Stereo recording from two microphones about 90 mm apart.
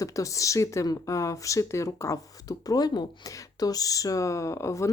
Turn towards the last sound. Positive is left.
turn(degrees=35)  # may be behind; listen again after turning